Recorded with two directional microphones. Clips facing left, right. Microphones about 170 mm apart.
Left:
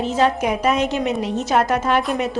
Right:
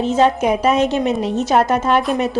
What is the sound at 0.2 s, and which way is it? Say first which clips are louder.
A woman's voice: right 3 dB; 30° right (ahead or behind).